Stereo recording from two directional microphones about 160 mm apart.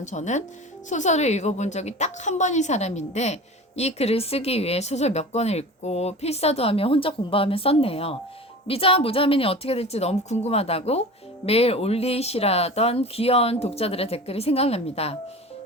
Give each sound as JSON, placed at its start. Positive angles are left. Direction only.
{"t": 0.0, "sound": "a woman's voice", "side_deg": 50}